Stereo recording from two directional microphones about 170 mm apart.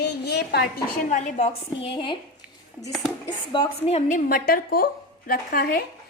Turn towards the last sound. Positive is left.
turn(degrees=60)  # may be behind; listen again after turning